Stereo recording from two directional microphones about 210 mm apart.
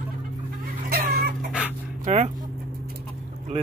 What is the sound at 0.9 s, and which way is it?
Chicken, 45° right (ahead or behind).